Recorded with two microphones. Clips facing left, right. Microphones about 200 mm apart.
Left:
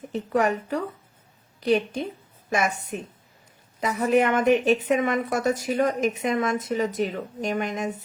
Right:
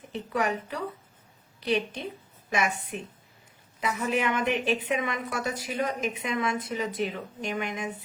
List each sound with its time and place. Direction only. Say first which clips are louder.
0.1 s speech: left 5 dB; 45° left (ahead or behind)
4.1 s speech: left 9 dB; 50° left (ahead or behind)